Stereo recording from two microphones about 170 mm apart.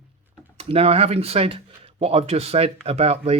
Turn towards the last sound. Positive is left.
turn(degrees=-35)  # may be behind; listen again after turning